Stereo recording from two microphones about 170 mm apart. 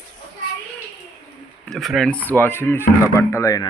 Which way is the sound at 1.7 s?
Centre (ahead or behind).